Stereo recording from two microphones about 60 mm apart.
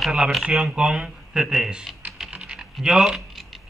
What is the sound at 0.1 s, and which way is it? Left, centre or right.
Speech, centre.